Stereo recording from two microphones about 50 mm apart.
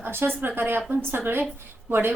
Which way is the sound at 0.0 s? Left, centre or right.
Right.